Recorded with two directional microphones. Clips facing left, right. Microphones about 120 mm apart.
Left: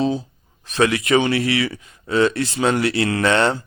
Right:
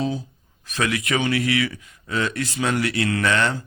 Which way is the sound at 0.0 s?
30° left (ahead or behind).